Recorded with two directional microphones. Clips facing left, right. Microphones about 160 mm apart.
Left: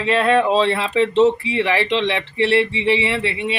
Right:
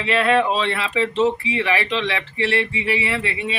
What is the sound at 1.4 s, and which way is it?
Speech, 35° left (ahead or behind).